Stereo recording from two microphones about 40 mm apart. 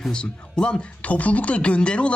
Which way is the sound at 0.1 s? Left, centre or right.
Left.